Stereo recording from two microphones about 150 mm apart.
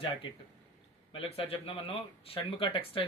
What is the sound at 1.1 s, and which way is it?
Speech, 40° left (ahead or behind).